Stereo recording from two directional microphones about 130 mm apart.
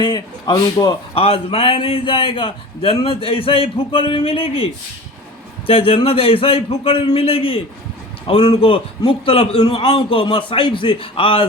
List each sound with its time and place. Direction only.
0.0 s a man's voice: 35° left (ahead or behind)
1.1 s a man's voice: 45° left (ahead or behind)